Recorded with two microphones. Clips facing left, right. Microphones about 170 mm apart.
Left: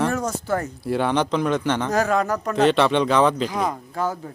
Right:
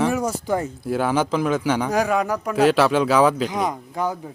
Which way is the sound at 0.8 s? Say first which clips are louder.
Left 2 dB; centre (ahead or behind).